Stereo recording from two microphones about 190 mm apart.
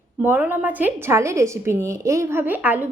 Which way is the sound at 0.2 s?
10° right (ahead or behind).